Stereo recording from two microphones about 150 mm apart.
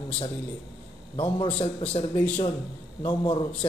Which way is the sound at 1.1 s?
35° left (ahead or behind).